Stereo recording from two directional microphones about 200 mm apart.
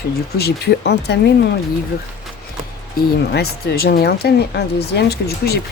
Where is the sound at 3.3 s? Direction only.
55° left (ahead or behind).